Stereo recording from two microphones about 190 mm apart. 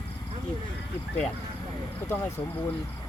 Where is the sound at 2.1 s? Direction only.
15° left (ahead or behind).